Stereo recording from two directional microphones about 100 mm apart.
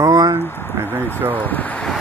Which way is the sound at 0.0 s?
30° right (ahead or behind).